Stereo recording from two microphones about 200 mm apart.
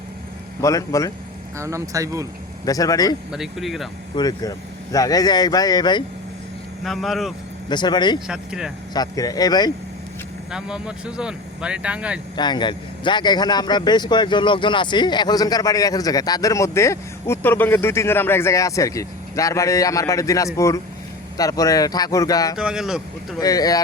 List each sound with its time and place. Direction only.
0.6 s speech: 15° left (ahead or behind)
1.5 s speech: 15° right (ahead or behind)
2.6 s speech: 15° left (ahead or behind)
3.3 s speech: centre (ahead or behind)
4.1 s speech: 20° left (ahead or behind)
6.8 s speech: centre (ahead or behind)
7.7 s speech: 20° left (ahead or behind)
8.3 s speech: 5° right (ahead or behind)
8.9 s speech: 20° left (ahead or behind)
10.5 s speech: 5° right (ahead or behind)
12.4 s speech: 20° left (ahead or behind)
22.5 s speech: 5° right (ahead or behind)
23.4 s speech: 20° left (ahead or behind)